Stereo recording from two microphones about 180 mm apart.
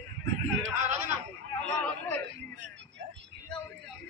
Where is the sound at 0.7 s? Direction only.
40° right (ahead or behind).